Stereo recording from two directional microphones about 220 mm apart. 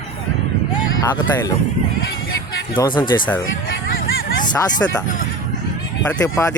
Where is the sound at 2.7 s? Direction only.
20° left (ahead or behind).